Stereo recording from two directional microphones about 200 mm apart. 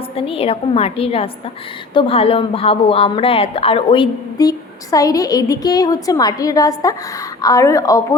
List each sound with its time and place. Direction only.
0.2 s a woman's voice: 30° left (ahead or behind)